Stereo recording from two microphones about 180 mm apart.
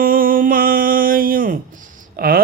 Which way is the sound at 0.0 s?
50° right (ahead or behind).